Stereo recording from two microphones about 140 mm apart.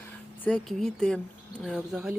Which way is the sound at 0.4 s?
5° left (ahead or behind).